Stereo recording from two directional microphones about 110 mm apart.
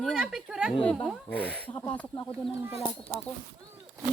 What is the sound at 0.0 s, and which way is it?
Speech, centre (ahead or behind).